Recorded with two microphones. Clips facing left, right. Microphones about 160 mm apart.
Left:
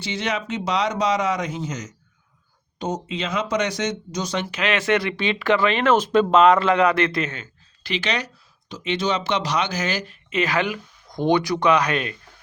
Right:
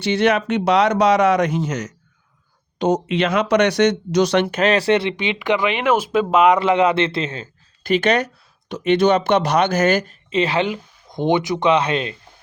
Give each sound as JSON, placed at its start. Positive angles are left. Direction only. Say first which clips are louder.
{"t": 0.0, "sound": "speech", "louder": "right 9 dB", "side_deg": -60}
{"t": 4.6, "sound": "speech", "louder": "right 2 dB", "side_deg": -35}
{"t": 5.1, "sound": "speech", "louder": "even", "side_deg": -15}
{"t": 7.9, "sound": "speech", "louder": "right 9 dB", "side_deg": -50}
{"t": 10.2, "sound": "speech", "louder": "right 2 dB", "side_deg": -30}